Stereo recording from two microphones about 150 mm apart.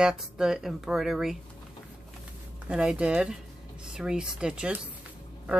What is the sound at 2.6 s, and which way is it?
Speech, 5° right (ahead or behind).